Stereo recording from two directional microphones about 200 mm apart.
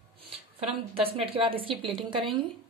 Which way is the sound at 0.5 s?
30° right (ahead or behind).